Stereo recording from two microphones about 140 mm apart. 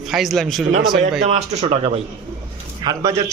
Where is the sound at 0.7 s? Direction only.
70° right (ahead or behind).